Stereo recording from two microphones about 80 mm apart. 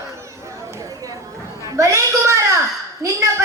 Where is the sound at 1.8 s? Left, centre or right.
Right.